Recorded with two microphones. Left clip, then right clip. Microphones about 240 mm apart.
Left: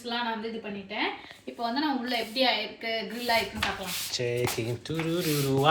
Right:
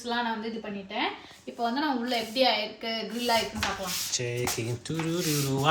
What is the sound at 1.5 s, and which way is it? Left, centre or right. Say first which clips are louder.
Speech: right 1 dB; centre.